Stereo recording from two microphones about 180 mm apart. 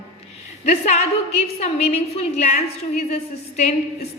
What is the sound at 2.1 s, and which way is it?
Speech, 35° left (ahead or behind).